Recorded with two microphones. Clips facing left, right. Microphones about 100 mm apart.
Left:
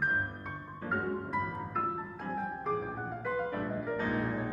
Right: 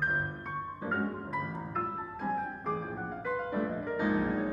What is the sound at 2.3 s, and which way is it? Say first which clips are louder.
Music: even; centre (ahead or behind).